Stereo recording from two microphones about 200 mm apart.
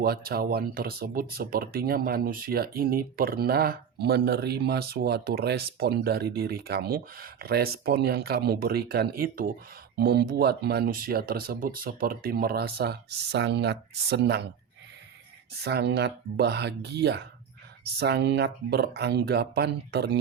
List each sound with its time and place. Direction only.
0.0 s speech: 50° right (ahead or behind)
15.6 s speech: 55° right (ahead or behind)